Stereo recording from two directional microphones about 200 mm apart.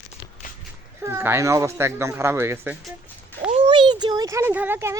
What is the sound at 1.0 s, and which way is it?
Speech, 10° right (ahead or behind).